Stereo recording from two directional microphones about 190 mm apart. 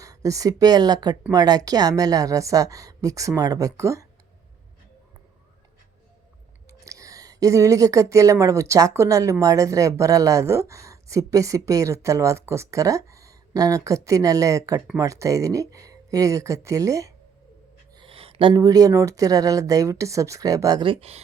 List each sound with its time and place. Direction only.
0.0 s a woman's voice: 15° right (ahead or behind)
6.7 s a woman's voice: 15° right (ahead or behind)
17.9 s speech: 30° right (ahead or behind)